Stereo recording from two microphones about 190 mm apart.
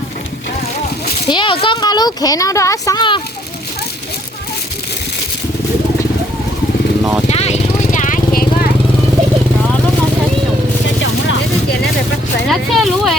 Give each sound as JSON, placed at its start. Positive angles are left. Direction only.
{"t": 1.3, "sound": "speech", "side_deg": 25}
{"t": 7.3, "sound": "vehicle", "side_deg": 35}
{"t": 11.0, "sound": "vehicle", "side_deg": 75}
{"t": 12.5, "sound": "a sound", "side_deg": 0}